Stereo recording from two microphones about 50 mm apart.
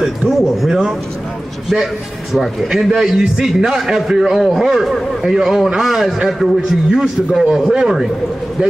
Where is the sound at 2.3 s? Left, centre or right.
Centre.